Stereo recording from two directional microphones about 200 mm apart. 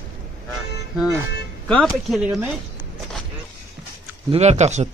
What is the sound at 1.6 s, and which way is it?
Speech, 5° left (ahead or behind).